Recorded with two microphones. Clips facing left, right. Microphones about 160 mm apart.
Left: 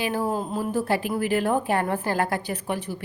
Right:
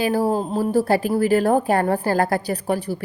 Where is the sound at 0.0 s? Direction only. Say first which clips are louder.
Right 6 dB; 35° right (ahead or behind).